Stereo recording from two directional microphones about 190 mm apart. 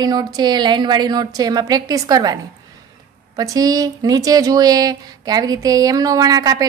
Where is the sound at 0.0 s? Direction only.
20° right (ahead or behind).